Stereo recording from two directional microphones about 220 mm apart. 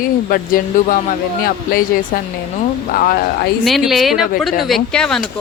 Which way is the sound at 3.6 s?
Centre (ahead or behind).